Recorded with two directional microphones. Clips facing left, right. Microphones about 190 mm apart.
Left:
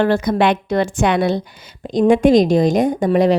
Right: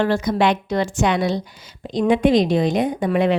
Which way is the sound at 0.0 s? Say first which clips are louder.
Left 3 dB; 60° left (ahead or behind).